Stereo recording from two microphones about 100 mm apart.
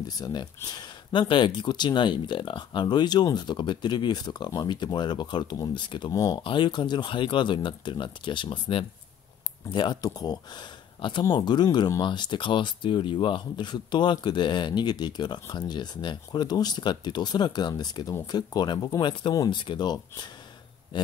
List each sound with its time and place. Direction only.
0.2 s speech: 45° left (ahead or behind)
6.1 s speech: 40° left (ahead or behind)
6.4 s speech: 55° left (ahead or behind)
9.7 s speech: 50° left (ahead or behind)